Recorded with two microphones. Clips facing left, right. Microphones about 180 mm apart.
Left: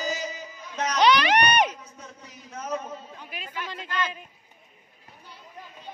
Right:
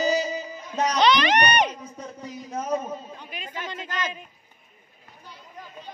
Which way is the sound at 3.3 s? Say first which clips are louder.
Right 1 dB; 5° left (ahead or behind).